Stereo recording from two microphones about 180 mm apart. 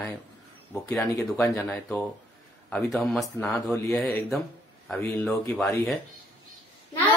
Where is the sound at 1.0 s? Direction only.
20° left (ahead or behind).